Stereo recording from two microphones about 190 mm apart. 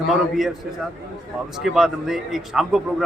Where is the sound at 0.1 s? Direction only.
Centre (ahead or behind).